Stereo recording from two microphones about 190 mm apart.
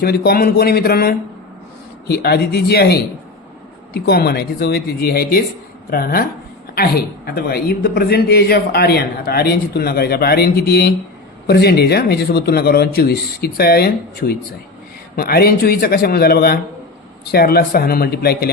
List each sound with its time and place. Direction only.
0.0 s a man's voice: 55° left (ahead or behind)